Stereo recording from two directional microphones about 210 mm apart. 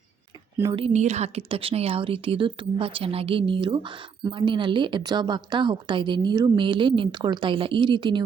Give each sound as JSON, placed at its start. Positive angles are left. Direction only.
{"t": 0.5, "sound": "speech", "side_deg": -15}
{"t": 0.8, "sound": "speech", "side_deg": -30}